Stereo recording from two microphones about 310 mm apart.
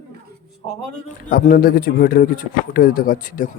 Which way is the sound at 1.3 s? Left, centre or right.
Left.